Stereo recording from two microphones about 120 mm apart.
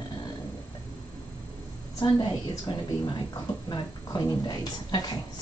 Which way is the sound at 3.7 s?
35° left (ahead or behind).